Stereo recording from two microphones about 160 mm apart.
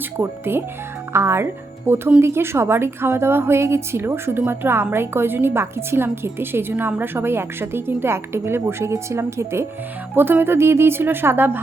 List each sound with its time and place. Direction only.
0.2 s a woman's voice: 15° right (ahead or behind)